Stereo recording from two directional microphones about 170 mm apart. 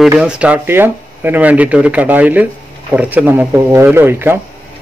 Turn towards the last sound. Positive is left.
turn(degrees=-15)  # may be behind; listen again after turning